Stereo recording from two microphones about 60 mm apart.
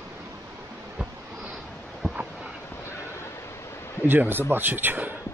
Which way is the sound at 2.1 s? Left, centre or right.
Right.